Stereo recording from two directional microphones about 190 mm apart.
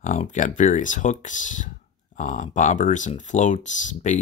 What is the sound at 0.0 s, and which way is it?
Speech, 40° left (ahead or behind).